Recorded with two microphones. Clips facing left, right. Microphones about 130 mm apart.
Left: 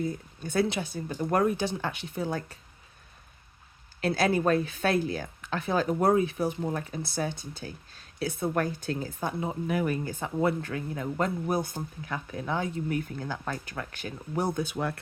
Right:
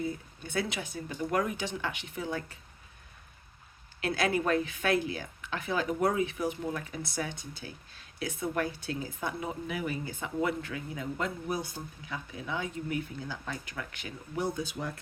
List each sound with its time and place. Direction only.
0.0 s speech: 40° left (ahead or behind)
4.0 s speech: 35° left (ahead or behind)
13.1 s speech: 50° left (ahead or behind)
13.7 s speech: 35° left (ahead or behind)
14.5 s speech: 60° left (ahead or behind)